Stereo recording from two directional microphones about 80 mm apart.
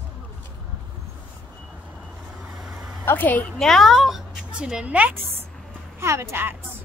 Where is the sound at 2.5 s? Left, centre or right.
Centre.